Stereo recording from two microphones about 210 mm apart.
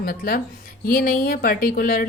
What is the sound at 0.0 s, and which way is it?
Speech, 45° left (ahead or behind).